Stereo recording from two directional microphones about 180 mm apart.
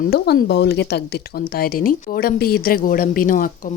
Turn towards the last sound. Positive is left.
turn(degrees=50)  # may be behind; listen again after turning